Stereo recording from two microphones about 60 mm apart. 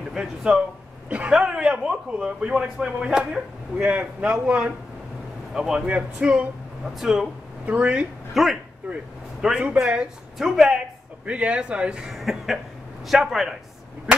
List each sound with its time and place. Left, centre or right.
0.1 s a man's voice: centre
5.9 s speech: right
7.0 s speech: centre
7.6 s speech: right
8.3 s speech: centre
8.8 s a man's voice: centre
11.2 s speech: centre
12.1 s speech: centre